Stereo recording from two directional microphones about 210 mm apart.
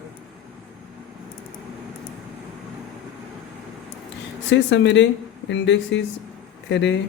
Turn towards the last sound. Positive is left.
turn(degrees=55)  # may be behind; listen again after turning